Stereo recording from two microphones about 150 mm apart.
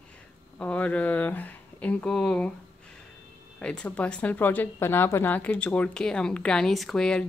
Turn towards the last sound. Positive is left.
turn(degrees=5)  # may be behind; listen again after turning